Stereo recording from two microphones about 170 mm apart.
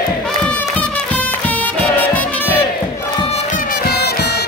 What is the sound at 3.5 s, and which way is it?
Music, 70° left (ahead or behind).